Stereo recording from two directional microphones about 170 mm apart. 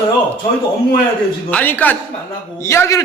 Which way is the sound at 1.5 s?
10° left (ahead or behind).